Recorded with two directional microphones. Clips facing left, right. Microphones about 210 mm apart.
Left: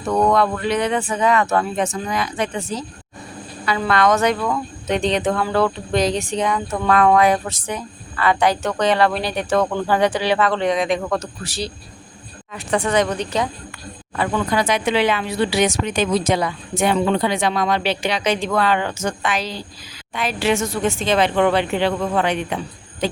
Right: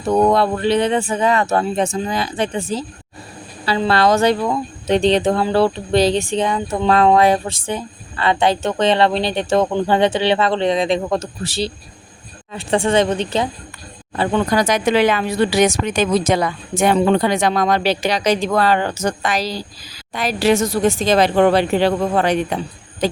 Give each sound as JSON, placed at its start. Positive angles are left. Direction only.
{"t": 0.0, "sound": "speech", "side_deg": -30}